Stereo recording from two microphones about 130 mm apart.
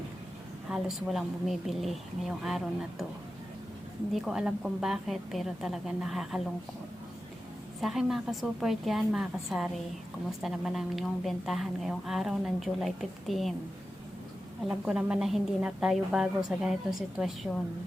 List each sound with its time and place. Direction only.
0.7 s a woman's voice: centre (ahead or behind)
4.1 s a woman's voice: 5° right (ahead or behind)
7.8 s a woman's voice: centre (ahead or behind)
14.7 s a woman's voice: 5° right (ahead or behind)